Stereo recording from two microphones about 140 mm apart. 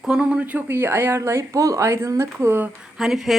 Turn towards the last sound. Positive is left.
turn(degrees=0)  # may be behind; listen again after turning